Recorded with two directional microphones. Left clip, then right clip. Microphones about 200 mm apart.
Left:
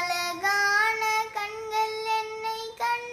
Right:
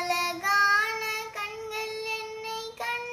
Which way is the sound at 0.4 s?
10° left (ahead or behind).